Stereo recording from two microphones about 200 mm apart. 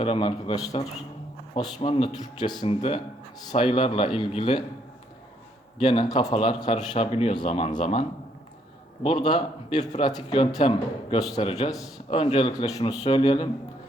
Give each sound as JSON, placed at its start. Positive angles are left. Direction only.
{"t": 0.0, "sound": "a man's voice", "side_deg": 25}
{"t": 5.8, "sound": "a man's voice", "side_deg": 25}
{"t": 9.0, "sound": "a man's voice", "side_deg": 25}